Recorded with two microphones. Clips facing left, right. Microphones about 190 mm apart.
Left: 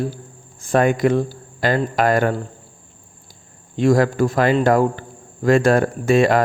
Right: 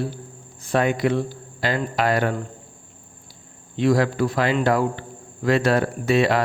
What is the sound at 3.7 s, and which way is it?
Speech, 45° left (ahead or behind).